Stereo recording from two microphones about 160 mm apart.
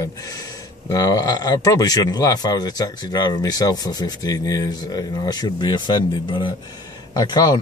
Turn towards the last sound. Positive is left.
turn(degrees=25)  # may be behind; listen again after turning